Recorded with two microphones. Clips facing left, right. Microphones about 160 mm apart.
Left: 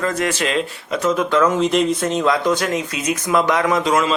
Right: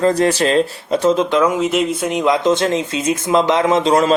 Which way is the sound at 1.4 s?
10° right (ahead or behind).